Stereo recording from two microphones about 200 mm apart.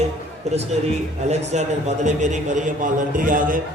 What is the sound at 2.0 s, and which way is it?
A man's voice, 35° right (ahead or behind).